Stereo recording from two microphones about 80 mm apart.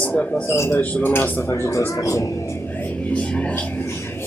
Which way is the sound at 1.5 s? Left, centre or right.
Left.